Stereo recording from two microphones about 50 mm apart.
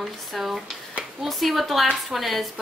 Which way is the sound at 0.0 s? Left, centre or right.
Centre.